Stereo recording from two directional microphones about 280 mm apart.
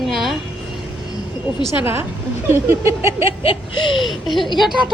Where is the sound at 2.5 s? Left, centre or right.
Centre.